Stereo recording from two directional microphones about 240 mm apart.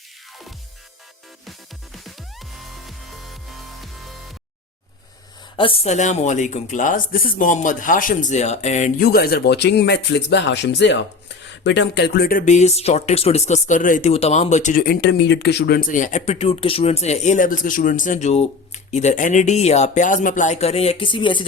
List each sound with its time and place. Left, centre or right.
5.5 s speech: left